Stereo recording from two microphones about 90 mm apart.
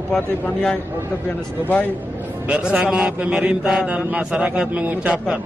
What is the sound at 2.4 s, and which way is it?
A man's voice, 15° right (ahead or behind).